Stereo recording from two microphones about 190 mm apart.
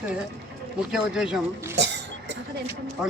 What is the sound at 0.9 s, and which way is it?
Speech, 5° right (ahead or behind).